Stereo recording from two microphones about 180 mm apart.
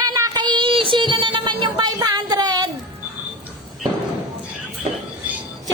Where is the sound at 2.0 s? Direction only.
25° right (ahead or behind).